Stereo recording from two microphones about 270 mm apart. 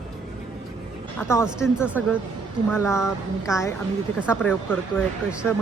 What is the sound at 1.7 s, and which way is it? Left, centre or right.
Speech, centre.